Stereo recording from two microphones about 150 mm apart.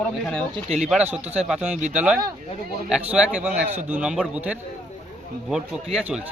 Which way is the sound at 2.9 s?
5° right (ahead or behind).